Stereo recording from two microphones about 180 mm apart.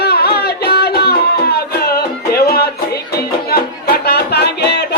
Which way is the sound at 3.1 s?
60° left (ahead or behind).